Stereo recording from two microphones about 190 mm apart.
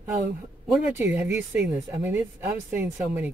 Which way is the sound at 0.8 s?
5° right (ahead or behind).